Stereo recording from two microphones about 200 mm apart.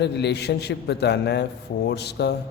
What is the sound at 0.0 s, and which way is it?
A man's voice, 55° left (ahead or behind).